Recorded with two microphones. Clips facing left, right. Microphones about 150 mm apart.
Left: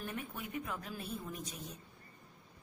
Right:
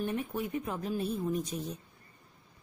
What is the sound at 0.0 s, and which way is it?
A woman's voice, 30° right (ahead or behind).